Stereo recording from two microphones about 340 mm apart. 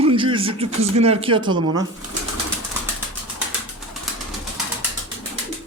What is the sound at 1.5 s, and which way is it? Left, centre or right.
Speech, right.